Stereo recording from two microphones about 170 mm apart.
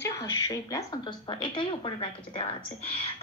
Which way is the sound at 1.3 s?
30° left (ahead or behind).